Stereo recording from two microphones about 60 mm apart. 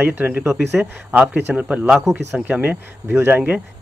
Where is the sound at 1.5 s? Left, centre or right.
Right.